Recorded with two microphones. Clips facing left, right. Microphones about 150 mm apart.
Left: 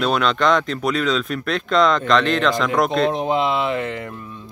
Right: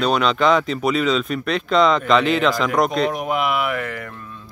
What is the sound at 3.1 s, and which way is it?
Speech, 25° left (ahead or behind).